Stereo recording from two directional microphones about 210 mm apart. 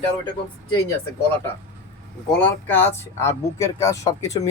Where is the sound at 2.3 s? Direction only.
10° left (ahead or behind).